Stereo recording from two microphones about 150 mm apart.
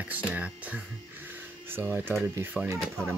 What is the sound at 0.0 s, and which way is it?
Speech, 10° right (ahead or behind).